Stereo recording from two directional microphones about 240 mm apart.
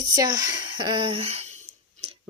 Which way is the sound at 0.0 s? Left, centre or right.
Centre.